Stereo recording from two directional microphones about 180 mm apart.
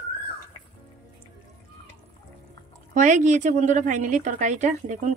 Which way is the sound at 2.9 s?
45° right (ahead or behind).